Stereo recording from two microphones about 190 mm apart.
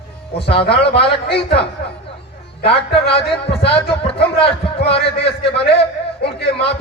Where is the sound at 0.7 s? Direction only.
30° left (ahead or behind).